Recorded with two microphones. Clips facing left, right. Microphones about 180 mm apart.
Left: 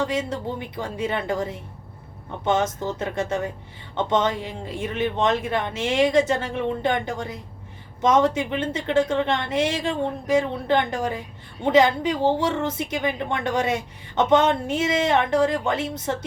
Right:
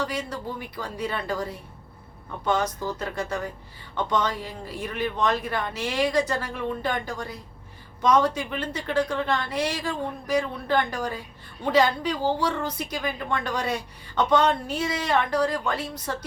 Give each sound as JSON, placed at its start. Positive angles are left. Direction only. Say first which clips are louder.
{"t": 0.0, "sound": "a woman's voice", "louder": "left 5 dB", "side_deg": 25}